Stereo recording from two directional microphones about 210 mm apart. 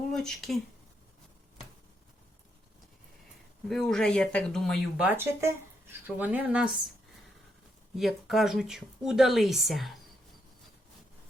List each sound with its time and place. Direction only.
0.1 s speech: centre (ahead or behind)
3.7 s speech: centre (ahead or behind)
7.9 s speech: centre (ahead or behind)